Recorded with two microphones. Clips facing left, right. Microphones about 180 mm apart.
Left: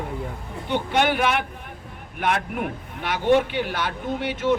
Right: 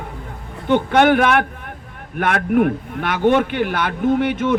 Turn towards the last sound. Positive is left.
turn(degrees=-55)  # may be behind; listen again after turning